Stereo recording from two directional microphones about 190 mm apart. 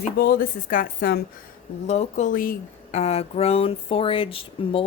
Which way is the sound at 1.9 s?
35° left (ahead or behind).